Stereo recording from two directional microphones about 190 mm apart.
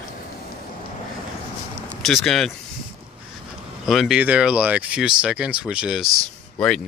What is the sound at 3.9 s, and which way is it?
Speech, centre (ahead or behind).